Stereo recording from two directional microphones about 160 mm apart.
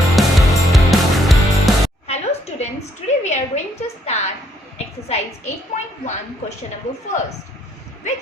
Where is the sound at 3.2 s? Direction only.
45° left (ahead or behind).